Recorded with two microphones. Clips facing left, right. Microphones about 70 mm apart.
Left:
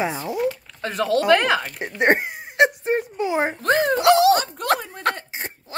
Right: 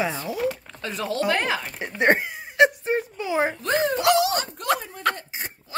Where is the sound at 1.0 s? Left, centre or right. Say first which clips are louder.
Left 6 dB; left.